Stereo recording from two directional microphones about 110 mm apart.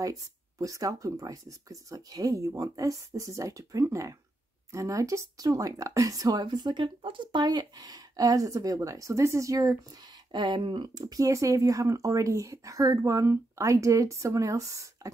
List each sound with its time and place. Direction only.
0.0 s speech: 30° right (ahead or behind)
10.3 s speech: 45° right (ahead or behind)